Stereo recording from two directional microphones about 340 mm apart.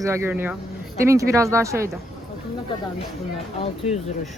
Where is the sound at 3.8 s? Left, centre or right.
Centre.